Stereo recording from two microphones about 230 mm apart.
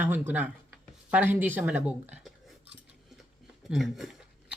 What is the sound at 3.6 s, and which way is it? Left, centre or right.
Speech, centre.